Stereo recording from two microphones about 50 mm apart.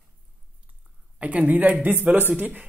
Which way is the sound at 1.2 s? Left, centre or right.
Right.